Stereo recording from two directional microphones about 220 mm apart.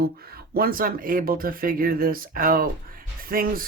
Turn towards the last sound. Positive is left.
turn(degrees=-40)  # may be behind; listen again after turning